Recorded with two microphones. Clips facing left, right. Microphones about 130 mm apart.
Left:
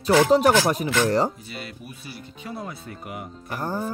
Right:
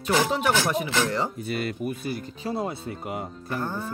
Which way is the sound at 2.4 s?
25° right (ahead or behind).